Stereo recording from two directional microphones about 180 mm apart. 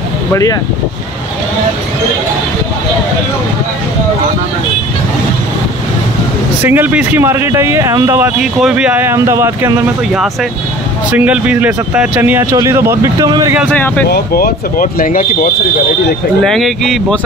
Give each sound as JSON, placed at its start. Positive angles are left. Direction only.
{"t": 0.3, "sound": "speech", "side_deg": 20}
{"t": 6.6, "sound": "speech", "side_deg": -10}
{"t": 8.4, "sound": "speech", "side_deg": 0}
{"t": 11.1, "sound": "speech", "side_deg": -10}
{"t": 13.7, "sound": "speech", "side_deg": 10}
{"t": 14.0, "sound": "speech", "side_deg": 60}
{"t": 16.4, "sound": "speech", "side_deg": 0}